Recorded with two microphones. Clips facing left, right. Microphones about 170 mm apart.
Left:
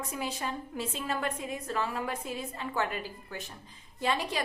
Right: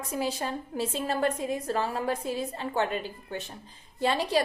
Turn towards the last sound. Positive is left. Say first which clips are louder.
# right 4 dB
turn(degrees=-30)  # may be behind; listen again after turning